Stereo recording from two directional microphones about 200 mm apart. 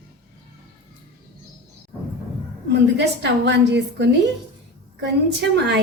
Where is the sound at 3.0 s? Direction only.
60° right (ahead or behind).